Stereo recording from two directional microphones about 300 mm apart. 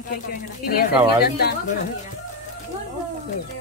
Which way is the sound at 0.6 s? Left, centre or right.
Left.